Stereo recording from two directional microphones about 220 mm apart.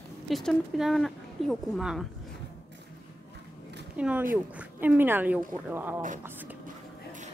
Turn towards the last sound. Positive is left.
turn(degrees=-35)  # may be behind; listen again after turning